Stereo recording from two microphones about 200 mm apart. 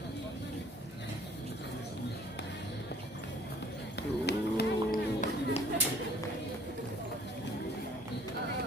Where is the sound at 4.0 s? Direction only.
55° left (ahead or behind).